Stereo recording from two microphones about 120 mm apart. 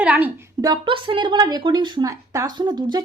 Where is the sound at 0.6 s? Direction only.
40° right (ahead or behind).